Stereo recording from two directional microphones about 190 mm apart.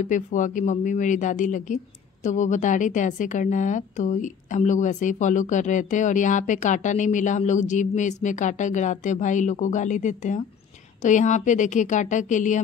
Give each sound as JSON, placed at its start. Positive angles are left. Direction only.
{"t": 0.0, "sound": "a woman's voice", "side_deg": 40}